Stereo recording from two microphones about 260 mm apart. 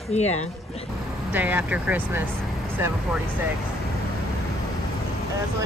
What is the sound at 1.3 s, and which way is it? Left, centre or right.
Speech, centre.